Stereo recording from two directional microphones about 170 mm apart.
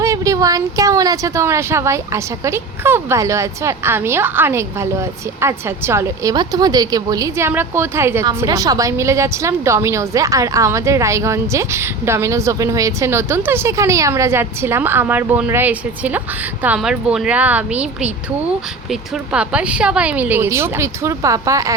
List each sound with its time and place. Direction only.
0.0 s speech: 20° right (ahead or behind)